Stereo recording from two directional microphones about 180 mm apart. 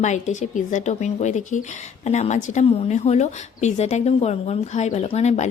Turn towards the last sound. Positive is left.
turn(degrees=35)  # may be behind; listen again after turning